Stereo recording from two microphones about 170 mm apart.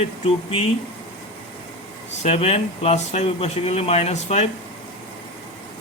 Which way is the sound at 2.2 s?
40° left (ahead or behind).